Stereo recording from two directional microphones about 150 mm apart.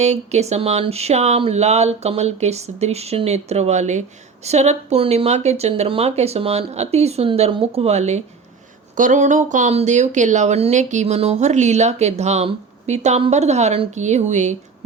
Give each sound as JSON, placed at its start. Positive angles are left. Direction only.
{"t": 0.0, "sound": "speech", "side_deg": -50}
{"t": 9.0, "sound": "speech", "side_deg": -60}